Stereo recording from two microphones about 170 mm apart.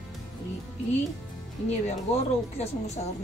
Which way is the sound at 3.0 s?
45° left (ahead or behind).